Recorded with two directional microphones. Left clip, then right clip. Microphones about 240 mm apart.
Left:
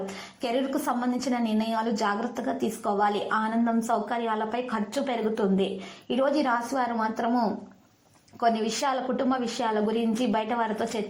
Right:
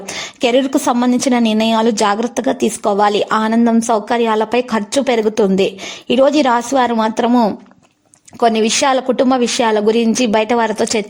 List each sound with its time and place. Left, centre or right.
0.4 s a woman's voice: right